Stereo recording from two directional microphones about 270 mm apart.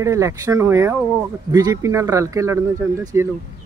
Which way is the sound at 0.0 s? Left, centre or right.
Centre.